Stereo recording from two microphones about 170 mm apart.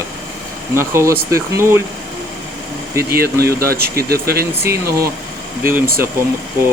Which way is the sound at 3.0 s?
65° right (ahead or behind).